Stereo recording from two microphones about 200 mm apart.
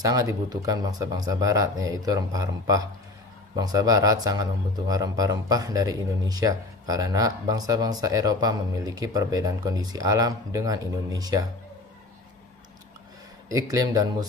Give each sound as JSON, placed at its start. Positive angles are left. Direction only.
{"t": 0.0, "sound": "a man's voice", "side_deg": -20}
{"t": 13.5, "sound": "a man's voice", "side_deg": -20}